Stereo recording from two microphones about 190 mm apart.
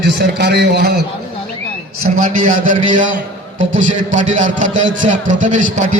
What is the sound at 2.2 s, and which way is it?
A man's voice, 45° right (ahead or behind).